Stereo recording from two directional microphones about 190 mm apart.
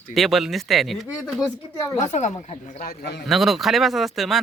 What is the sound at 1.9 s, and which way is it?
Speech, 40° left (ahead or behind).